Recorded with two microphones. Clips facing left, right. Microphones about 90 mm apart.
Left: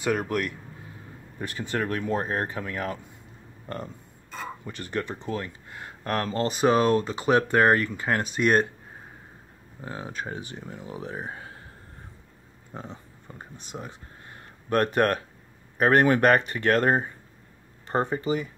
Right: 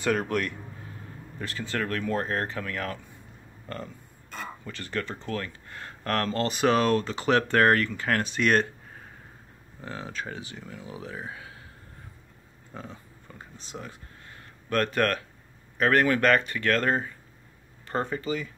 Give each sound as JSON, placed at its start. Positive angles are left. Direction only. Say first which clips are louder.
{"t": 0.0, "sound": "speech", "louder": "even", "side_deg": 5}
{"t": 1.4, "sound": "speech", "louder": "left 2 dB", "side_deg": 20}
{"t": 9.8, "sound": "speech", "louder": "left 1 dB", "side_deg": 25}
{"t": 11.2, "sound": "a sound", "louder": "left 2 dB", "side_deg": 35}
{"t": 12.7, "sound": "a sound", "louder": "left 2 dB", "side_deg": 20}
{"t": 15.8, "sound": "speech", "louder": "left 3 dB", "side_deg": 25}